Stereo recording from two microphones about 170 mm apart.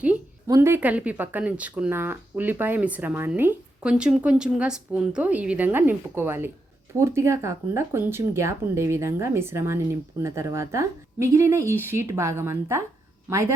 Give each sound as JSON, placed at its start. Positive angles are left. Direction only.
{"t": 0.4, "sound": "speech", "side_deg": -15}